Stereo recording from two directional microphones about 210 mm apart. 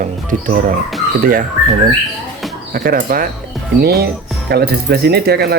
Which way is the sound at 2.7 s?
45° right (ahead or behind).